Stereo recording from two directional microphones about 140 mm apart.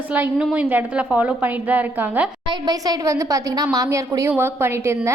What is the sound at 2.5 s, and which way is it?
A woman's voice, 30° right (ahead or behind).